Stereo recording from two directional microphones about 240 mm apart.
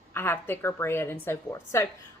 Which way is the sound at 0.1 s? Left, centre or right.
Centre.